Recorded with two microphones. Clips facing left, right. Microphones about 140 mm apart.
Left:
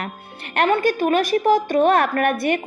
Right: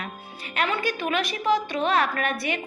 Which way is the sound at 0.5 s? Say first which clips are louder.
Left 8 dB; 55° left (ahead or behind).